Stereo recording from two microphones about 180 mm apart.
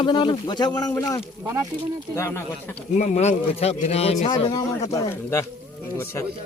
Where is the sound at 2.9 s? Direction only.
40° left (ahead or behind).